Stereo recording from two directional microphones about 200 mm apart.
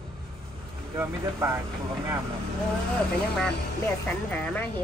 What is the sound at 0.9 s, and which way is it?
Speech, 10° right (ahead or behind).